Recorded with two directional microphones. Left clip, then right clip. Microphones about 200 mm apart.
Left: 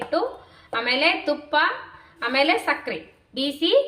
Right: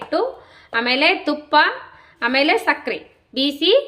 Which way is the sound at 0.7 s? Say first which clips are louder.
Right 4 dB; 65° right (ahead or behind).